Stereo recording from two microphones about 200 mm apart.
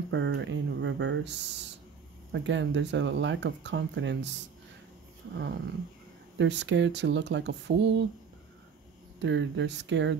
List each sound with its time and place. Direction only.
0.1 s speech: 65° right (ahead or behind)
5.3 s speech: 60° right (ahead or behind)
9.2 s speech: 65° right (ahead or behind)